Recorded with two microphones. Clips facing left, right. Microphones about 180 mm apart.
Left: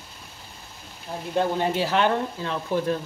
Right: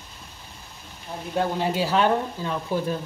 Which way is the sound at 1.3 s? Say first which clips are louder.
Left 1 dB; 10° right (ahead or behind).